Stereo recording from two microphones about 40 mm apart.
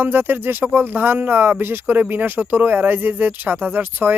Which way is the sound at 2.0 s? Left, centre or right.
Right.